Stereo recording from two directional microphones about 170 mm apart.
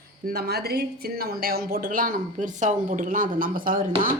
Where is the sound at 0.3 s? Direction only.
65° right (ahead or behind).